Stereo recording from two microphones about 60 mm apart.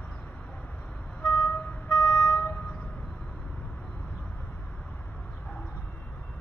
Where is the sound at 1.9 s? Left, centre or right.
Centre.